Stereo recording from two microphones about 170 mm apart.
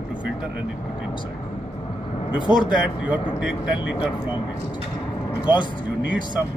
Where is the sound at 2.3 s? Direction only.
25° left (ahead or behind).